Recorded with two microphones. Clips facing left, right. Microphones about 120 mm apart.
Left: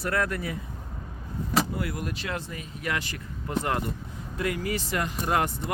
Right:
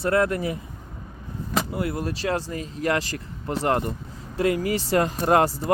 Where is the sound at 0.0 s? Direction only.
25° right (ahead or behind).